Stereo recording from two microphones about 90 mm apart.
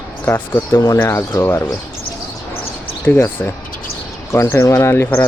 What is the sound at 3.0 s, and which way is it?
Speech, 25° left (ahead or behind).